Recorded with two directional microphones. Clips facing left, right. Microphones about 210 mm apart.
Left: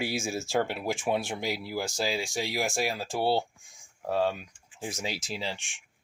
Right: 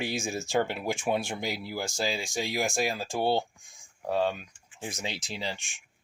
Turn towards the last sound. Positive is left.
turn(degrees=5)  # may be behind; listen again after turning